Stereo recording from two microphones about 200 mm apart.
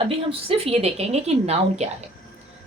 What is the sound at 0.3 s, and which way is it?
A woman's voice, 30° right (ahead or behind).